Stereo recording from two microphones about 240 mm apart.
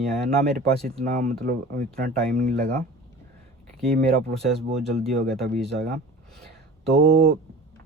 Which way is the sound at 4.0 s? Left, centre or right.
Right.